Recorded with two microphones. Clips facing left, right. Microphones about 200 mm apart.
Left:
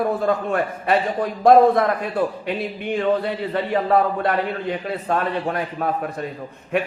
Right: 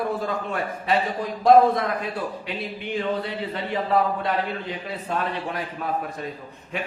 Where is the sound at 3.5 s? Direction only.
55° left (ahead or behind).